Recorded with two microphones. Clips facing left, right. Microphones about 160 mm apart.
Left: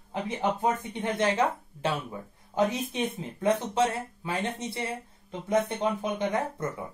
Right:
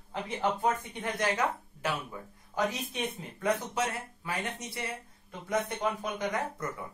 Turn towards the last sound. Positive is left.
turn(degrees=25)  # may be behind; listen again after turning